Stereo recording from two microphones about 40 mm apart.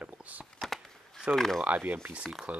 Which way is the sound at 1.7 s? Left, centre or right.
Right.